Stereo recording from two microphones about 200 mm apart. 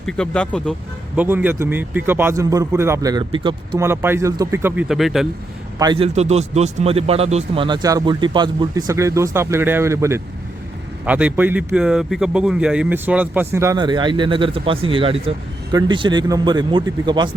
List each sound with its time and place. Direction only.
0.0 s speech: 5° left (ahead or behind)
1.1 s a man's voice: 10° right (ahead or behind); by 3.8 s 25° right (ahead or behind)
3.8 s a man's voice: 10° right (ahead or behind)
5.8 s a man's voice: 25° right (ahead or behind)